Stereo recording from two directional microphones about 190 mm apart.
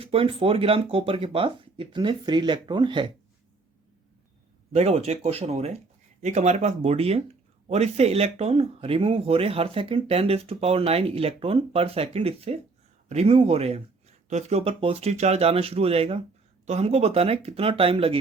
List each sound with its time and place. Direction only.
0.0 s speech: 30° right (ahead or behind)
4.7 s speech: 35° right (ahead or behind)